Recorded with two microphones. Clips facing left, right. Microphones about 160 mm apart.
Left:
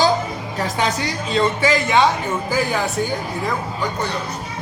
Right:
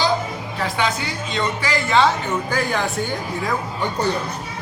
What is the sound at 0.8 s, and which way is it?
Speech, 35° left (ahead or behind).